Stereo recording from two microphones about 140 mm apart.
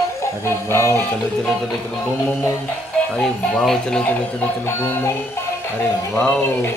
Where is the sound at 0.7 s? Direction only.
20° left (ahead or behind).